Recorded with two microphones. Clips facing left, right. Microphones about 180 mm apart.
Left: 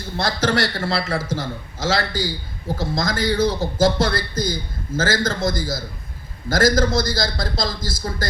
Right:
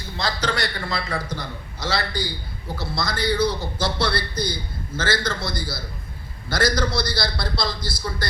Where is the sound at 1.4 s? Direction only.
90° left.